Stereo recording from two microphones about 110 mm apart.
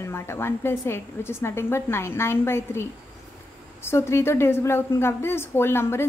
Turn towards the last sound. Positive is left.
turn(degrees=20)  # may be behind; listen again after turning